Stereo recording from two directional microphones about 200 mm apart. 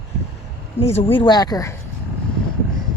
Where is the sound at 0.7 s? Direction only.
30° left (ahead or behind).